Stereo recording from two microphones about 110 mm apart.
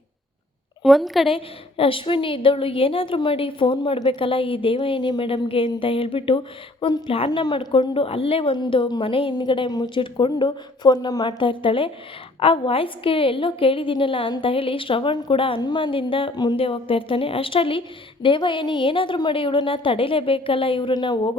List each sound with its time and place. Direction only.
0.8 s a woman's voice: centre (ahead or behind)
1.3 s a woman's voice: 55° left (ahead or behind)
7.9 s a woman's voice: 60° left (ahead or behind)
8.5 s a woman's voice: 45° left (ahead or behind)
10.9 s a woman's voice: 35° left (ahead or behind)
16.6 s a woman's voice: 55° left (ahead or behind)